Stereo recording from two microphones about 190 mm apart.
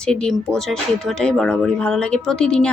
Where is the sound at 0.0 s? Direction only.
5° left (ahead or behind).